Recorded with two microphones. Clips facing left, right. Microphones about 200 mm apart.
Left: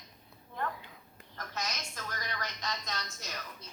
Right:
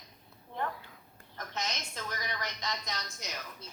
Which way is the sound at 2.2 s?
15° right (ahead or behind).